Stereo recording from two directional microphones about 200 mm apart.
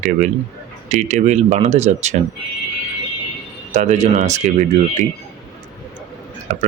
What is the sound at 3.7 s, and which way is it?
Speech, 35° right (ahead or behind).